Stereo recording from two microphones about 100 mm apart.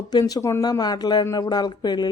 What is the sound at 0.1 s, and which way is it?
Speech, 40° left (ahead or behind).